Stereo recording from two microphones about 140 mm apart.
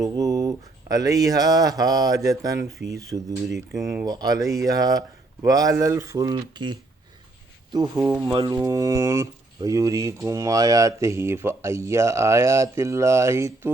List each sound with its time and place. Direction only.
0.0 s speech: 25° right (ahead or behind)
8.5 s speech: 25° right (ahead or behind)